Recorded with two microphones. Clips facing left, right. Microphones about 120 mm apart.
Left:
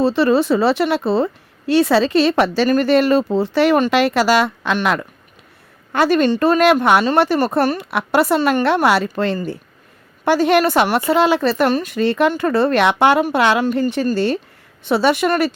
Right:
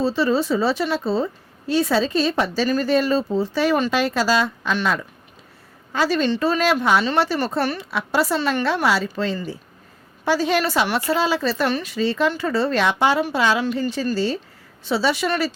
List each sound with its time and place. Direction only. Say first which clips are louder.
0.0 s a woman's voice: left 5 dB; 65° left (ahead or behind); by 8.6 s 50° left (ahead or behind)
8.6 s a woman's voice: left 5 dB; 60° left (ahead or behind)
13.7 s a woman's voice: left 5 dB; 50° left (ahead or behind)